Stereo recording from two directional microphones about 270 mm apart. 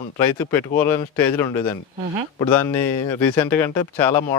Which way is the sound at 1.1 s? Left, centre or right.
Centre.